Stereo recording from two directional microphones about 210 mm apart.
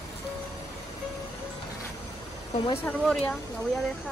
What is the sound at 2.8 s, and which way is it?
Speech, 5° left (ahead or behind).